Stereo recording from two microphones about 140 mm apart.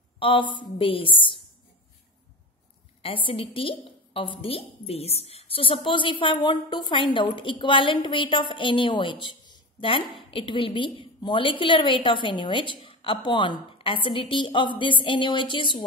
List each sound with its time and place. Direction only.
0.2 s a woman's voice: 35° left (ahead or behind)
3.3 s a woman's voice: 40° left (ahead or behind)